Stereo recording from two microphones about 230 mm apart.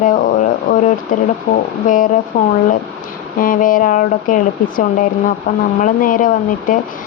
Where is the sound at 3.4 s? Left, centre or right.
Left.